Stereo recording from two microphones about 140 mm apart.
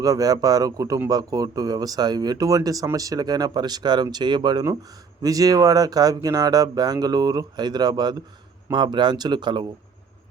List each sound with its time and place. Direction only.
0.0 s a man's voice: 25° right (ahead or behind)